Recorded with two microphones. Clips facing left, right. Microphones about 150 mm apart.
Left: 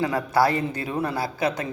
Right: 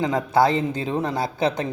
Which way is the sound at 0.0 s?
20° right (ahead or behind).